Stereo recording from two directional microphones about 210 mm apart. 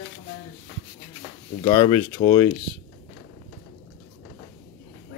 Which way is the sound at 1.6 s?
25° left (ahead or behind).